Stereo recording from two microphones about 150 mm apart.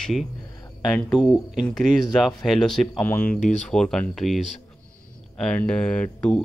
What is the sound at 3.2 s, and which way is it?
Speech, 60° left (ahead or behind).